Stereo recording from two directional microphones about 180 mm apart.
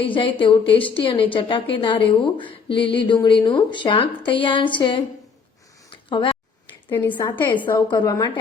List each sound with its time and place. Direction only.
0.0 s a woman's voice: 30° left (ahead or behind)
5.9 s a sound: 25° left (ahead or behind)
6.9 s a woman's voice: 10° left (ahead or behind)
7.2 s a woman's voice: 25° left (ahead or behind)